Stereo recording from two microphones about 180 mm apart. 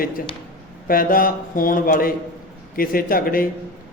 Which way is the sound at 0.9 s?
50° left (ahead or behind).